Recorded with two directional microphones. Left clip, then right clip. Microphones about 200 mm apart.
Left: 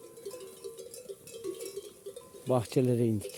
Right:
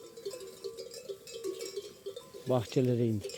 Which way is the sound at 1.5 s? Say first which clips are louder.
Even; 50° right (ahead or behind).